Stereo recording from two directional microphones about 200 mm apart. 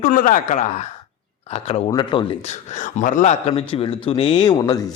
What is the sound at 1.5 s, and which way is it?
Speech, 30° left (ahead or behind).